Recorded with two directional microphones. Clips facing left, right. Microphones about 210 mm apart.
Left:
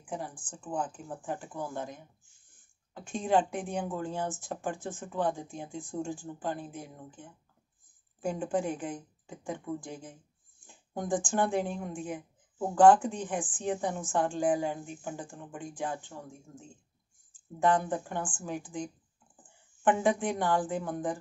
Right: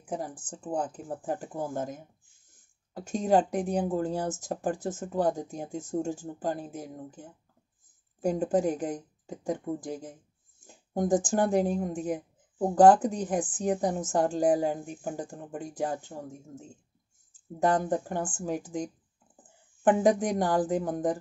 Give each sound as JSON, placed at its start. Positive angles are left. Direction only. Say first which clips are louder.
{"t": 0.0, "sound": "speech", "louder": "right 4 dB", "side_deg": -40}